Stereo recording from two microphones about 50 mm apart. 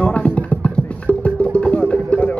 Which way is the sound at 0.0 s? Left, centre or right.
Left.